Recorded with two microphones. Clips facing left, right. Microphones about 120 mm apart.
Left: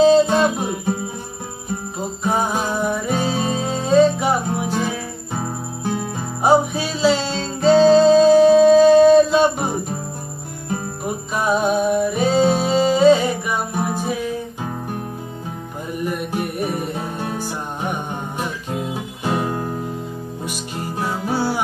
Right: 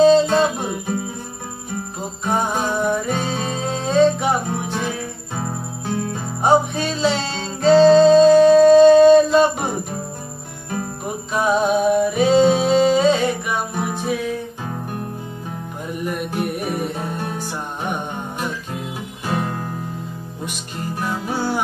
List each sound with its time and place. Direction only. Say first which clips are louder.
0.0 s music: even; 10° left (ahead or behind)
2.2 s music: even; centre (ahead or behind)
6.4 s music: left 1 dB; 5° left (ahead or behind)
11.3 s music: right 1 dB; centre (ahead or behind)
16.1 s music: right 2 dB; centre (ahead or behind)
19.2 s music: left 2 dB; 20° left (ahead or behind)